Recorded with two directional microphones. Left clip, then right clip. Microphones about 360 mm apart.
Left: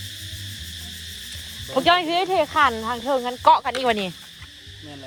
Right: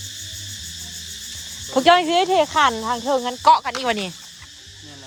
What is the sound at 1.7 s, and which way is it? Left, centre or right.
Speech, centre.